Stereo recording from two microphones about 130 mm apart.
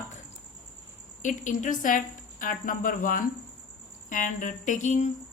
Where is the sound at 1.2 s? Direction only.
75° left (ahead or behind).